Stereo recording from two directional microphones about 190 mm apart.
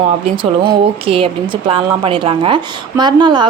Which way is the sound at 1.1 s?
30° right (ahead or behind).